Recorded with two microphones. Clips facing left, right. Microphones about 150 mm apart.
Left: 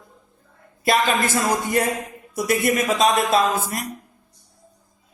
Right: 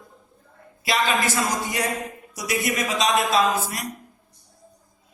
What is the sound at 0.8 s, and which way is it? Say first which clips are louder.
Speech: left 3 dB; 50° left (ahead or behind).